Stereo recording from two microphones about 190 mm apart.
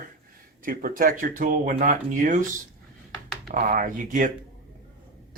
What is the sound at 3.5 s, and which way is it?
Speech, 45° right (ahead or behind).